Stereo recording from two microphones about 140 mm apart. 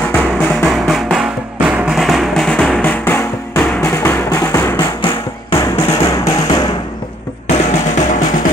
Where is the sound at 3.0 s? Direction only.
15° left (ahead or behind).